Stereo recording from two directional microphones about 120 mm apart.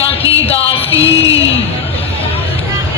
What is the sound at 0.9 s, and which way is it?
Music, 30° right (ahead or behind).